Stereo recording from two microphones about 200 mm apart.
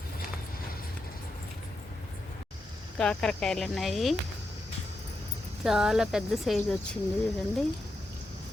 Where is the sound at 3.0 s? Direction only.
5° left (ahead or behind).